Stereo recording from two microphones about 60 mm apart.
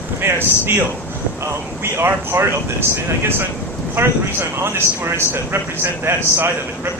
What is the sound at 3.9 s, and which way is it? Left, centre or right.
Speech, right.